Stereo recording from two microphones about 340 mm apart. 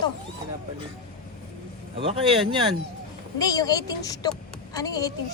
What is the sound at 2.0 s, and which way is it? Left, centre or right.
Speech, centre.